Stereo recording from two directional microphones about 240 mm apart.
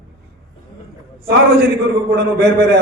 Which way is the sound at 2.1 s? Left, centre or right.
Right.